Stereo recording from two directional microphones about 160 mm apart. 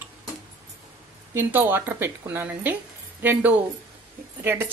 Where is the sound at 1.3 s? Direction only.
10° right (ahead or behind).